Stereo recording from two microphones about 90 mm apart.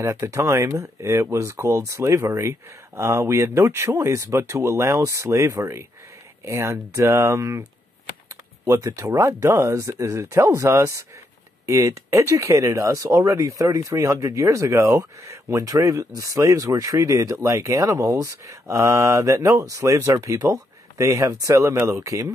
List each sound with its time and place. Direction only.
0.0 s speech: 35° right (ahead or behind)
8.6 s speech: 35° right (ahead or behind)